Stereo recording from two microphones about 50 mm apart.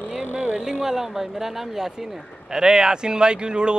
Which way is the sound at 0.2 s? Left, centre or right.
Right.